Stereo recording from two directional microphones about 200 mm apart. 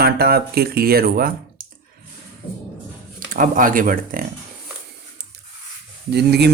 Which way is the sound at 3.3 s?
45° right (ahead or behind).